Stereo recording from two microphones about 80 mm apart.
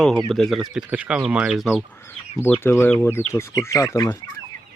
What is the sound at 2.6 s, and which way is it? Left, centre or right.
Speech, left.